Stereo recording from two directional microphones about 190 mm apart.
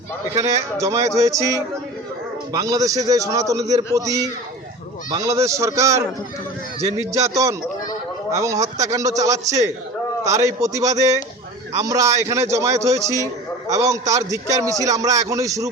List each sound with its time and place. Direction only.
0.3 s a man's voice: 15° right (ahead or behind)